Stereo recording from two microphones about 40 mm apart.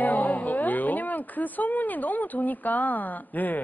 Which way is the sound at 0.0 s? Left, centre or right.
Left.